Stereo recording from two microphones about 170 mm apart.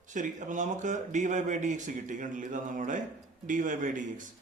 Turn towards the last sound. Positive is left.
turn(degrees=-50)  # may be behind; listen again after turning